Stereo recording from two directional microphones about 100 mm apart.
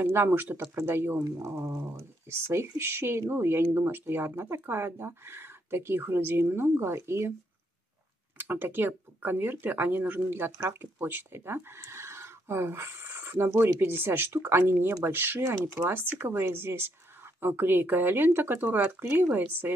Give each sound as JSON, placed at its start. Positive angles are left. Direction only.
{"t": 0.0, "sound": "speech", "side_deg": -25}
{"t": 1.2, "sound": "speech", "side_deg": -35}
{"t": 8.4, "sound": "speech", "side_deg": -20}